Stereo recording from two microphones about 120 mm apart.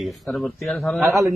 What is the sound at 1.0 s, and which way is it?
Speech, 25° right (ahead or behind).